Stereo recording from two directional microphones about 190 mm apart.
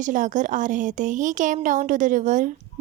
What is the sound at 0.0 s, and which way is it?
Speech, 40° right (ahead or behind).